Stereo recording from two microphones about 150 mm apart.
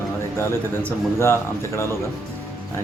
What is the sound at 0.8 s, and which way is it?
Speech, 15° left (ahead or behind).